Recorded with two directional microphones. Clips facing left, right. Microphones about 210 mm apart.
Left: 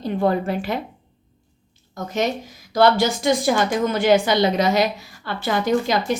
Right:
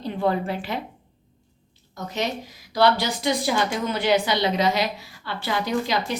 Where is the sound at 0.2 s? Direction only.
45° left (ahead or behind).